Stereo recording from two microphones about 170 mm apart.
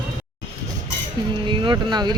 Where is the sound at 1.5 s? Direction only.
25° right (ahead or behind).